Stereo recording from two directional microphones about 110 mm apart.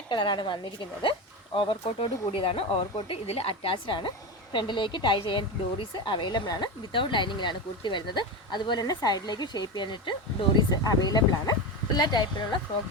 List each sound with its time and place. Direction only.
0.1 s speech: 45° left (ahead or behind)